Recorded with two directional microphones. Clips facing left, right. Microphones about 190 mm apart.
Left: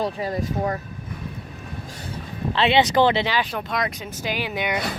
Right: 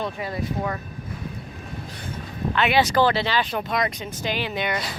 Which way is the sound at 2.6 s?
25° left (ahead or behind).